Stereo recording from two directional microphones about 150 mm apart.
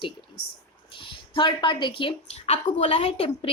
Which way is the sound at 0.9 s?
35° left (ahead or behind).